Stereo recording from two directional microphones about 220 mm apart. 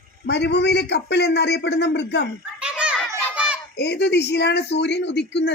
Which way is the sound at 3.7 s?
50° left (ahead or behind).